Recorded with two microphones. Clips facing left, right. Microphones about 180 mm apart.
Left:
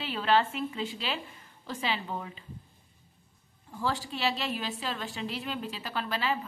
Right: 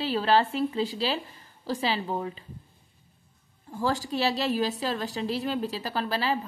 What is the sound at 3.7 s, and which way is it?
A woman's voice, 45° right (ahead or behind).